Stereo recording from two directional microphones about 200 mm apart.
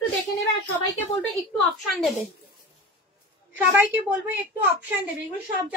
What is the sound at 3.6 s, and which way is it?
A woman's voice, 10° right (ahead or behind).